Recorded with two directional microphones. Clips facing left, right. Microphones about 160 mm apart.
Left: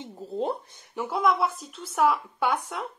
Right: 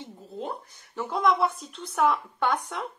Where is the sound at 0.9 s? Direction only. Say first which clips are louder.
Even; 5° left (ahead or behind).